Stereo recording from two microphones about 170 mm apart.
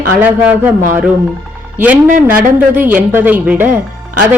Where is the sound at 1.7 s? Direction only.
10° right (ahead or behind).